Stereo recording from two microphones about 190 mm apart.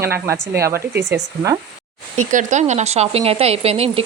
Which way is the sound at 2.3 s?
40° right (ahead or behind).